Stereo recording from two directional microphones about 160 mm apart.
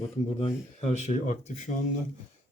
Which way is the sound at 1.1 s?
45° left (ahead or behind).